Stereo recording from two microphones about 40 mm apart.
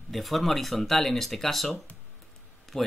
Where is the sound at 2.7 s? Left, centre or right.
Centre.